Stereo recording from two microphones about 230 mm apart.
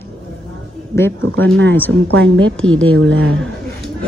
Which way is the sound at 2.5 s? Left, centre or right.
Centre.